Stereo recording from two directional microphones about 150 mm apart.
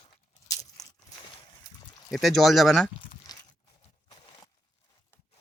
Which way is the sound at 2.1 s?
Centre (ahead or behind).